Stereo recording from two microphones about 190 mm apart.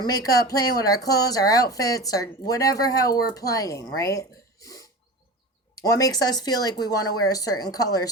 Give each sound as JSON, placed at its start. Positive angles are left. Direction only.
{"t": 0.0, "sound": "speech", "side_deg": 20}
{"t": 3.9, "sound": "a sound", "side_deg": 15}
{"t": 5.7, "sound": "speech", "side_deg": 20}